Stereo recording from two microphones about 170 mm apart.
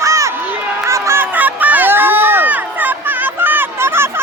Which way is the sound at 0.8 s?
15° right (ahead or behind).